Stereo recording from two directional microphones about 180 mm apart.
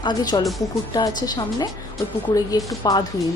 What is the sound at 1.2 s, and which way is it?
Speech, 20° left (ahead or behind).